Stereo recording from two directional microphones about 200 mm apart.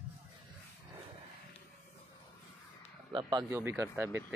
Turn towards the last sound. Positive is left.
turn(degrees=-10)  # may be behind; listen again after turning